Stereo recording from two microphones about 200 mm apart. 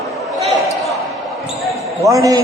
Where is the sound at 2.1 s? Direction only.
15° right (ahead or behind).